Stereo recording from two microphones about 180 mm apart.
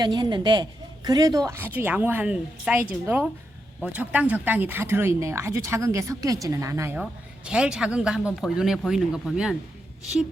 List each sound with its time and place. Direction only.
0.0 s speech: 25° right (ahead or behind)
7.0 s speech: 5° right (ahead or behind)